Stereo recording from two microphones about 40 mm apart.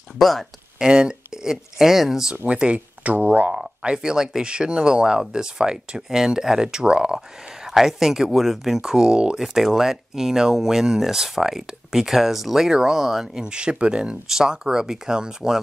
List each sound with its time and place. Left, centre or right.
0.2 s speech: centre
0.7 s speech: centre
2.4 s speech: right
3.8 s speech: centre
4.5 s speech: right
7.2 s speech: centre
9.4 s speech: centre